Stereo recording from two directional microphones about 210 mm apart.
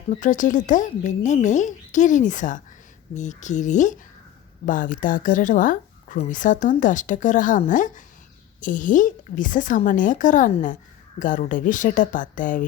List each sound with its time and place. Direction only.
0.1 s a woman's voice: 35° left (ahead or behind)